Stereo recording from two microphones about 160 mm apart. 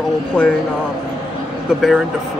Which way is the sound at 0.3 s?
10° left (ahead or behind).